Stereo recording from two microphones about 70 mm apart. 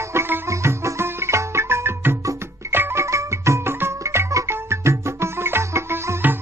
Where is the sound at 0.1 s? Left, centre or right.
Right.